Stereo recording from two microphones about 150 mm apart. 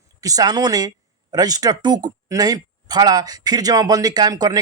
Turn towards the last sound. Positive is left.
turn(degrees=-25)  # may be behind; listen again after turning